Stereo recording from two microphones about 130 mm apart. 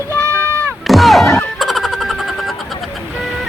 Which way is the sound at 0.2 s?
20° right (ahead or behind).